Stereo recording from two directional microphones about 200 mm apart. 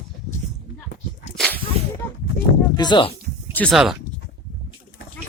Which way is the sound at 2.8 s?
25° left (ahead or behind).